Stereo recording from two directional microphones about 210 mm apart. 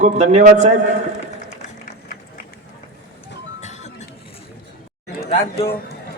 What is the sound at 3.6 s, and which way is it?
Music, 35° left (ahead or behind).